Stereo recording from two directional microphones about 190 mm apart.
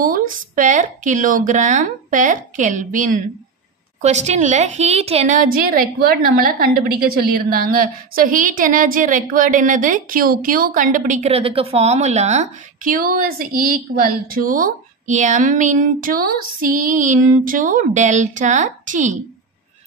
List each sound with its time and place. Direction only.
0.0 s a woman's voice: 45° right (ahead or behind)